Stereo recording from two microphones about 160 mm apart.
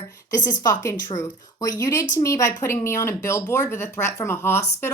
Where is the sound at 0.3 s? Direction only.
25° left (ahead or behind).